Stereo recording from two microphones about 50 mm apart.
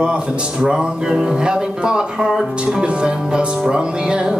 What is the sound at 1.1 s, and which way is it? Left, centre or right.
Speech, centre.